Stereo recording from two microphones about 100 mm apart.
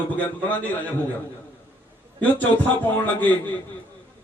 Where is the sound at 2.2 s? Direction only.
15° left (ahead or behind).